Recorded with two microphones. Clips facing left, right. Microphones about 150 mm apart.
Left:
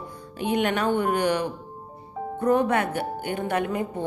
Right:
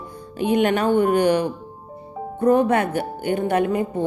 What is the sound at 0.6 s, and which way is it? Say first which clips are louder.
Speech: right 5 dB; 45° right (ahead or behind).